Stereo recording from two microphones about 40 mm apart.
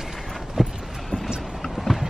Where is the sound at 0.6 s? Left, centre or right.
Centre.